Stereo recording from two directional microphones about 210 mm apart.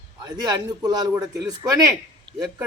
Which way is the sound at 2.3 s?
20° right (ahead or behind).